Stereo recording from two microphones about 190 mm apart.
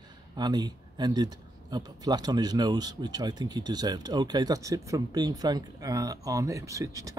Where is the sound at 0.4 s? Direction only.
20° right (ahead or behind).